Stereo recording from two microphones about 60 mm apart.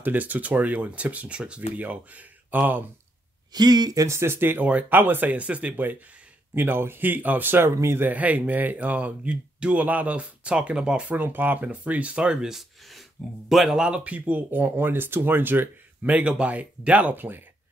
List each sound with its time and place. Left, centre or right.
0.0 s speech: right
3.8 s speech: right
4.1 s speech: right
4.6 s speech: right
7.7 s speech: right
8.0 s speech: right
11.1 s speech: right; by 13.7 s centre
13.7 s speech: centre; by 15.7 s right
16.0 s speech: right